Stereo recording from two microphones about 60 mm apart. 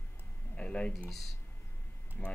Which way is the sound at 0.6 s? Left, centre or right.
Centre.